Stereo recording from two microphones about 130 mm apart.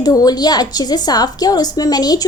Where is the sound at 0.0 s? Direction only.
30° left (ahead or behind).